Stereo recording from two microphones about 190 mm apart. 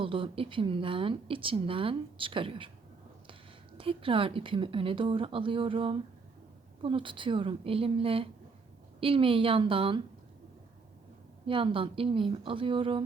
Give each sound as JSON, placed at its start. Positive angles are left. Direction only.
{"t": 0.0, "sound": "speech", "side_deg": -25}
{"t": 3.8, "sound": "speech", "side_deg": -30}
{"t": 11.4, "sound": "speech", "side_deg": -25}